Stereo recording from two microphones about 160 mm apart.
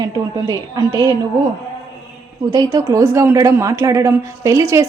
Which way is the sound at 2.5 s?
25° right (ahead or behind).